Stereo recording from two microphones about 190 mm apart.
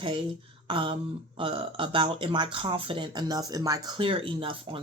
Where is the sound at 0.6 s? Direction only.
25° right (ahead or behind).